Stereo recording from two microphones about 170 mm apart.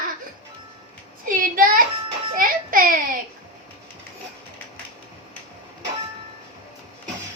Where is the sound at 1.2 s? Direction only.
55° right (ahead or behind).